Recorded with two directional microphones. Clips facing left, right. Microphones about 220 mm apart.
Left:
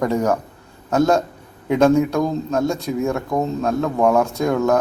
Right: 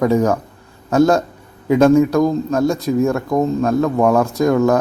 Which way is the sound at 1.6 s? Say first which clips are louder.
Right 4 dB; 5° right (ahead or behind).